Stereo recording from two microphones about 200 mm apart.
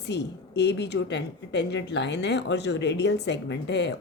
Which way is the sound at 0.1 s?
60° left (ahead or behind).